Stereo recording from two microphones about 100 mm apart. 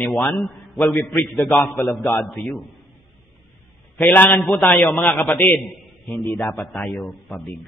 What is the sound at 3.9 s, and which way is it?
A man's voice, 20° left (ahead or behind).